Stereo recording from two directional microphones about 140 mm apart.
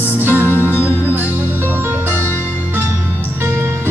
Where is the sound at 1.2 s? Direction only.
15° right (ahead or behind).